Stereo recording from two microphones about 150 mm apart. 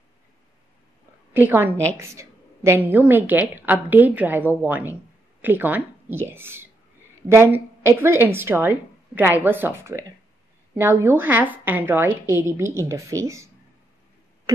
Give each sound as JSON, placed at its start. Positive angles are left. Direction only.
{"t": 1.3, "sound": "a woman's voice", "side_deg": -15}